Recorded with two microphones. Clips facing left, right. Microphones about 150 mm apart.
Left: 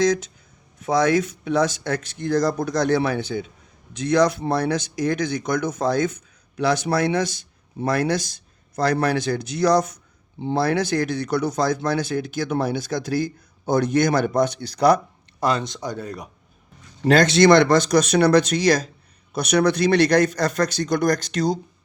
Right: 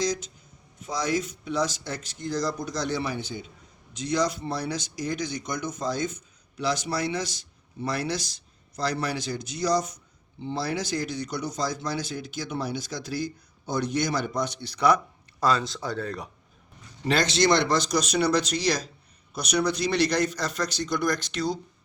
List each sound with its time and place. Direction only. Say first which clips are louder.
1.5 s speech: left 7 dB; 55° left (ahead or behind); by 14.9 s 40° left (ahead or behind)
15.4 s speech: left 2 dB; 20° left (ahead or behind)
17.0 s a man's voice: left 8 dB; 50° left (ahead or behind)